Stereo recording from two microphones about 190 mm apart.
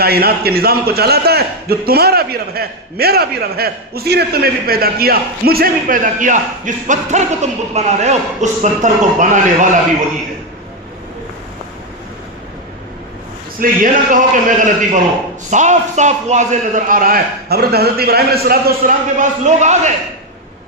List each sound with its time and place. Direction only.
0.0 s a man's voice: 55° right (ahead or behind)
13.6 s a man's voice: 45° right (ahead or behind)